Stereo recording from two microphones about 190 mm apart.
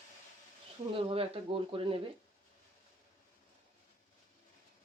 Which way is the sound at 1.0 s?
30° right (ahead or behind).